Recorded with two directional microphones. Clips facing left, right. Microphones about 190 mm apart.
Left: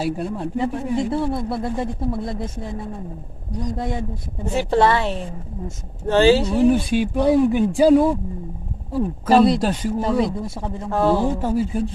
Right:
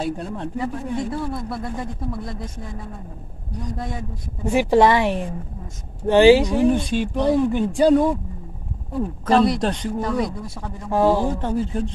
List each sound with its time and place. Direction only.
0.0 s speech: 5° left (ahead or behind)
0.9 s speech: 25° left (ahead or behind)
4.5 s a woman's voice: 10° right (ahead or behind)
6.7 s speech: 5° left (ahead or behind)
9.9 s speech: 25° left (ahead or behind)
10.9 s a woman's voice: 15° right (ahead or behind)
11.2 s speech: 5° left (ahead or behind)